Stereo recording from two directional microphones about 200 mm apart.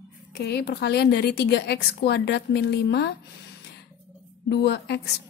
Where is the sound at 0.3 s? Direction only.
55° left (ahead or behind).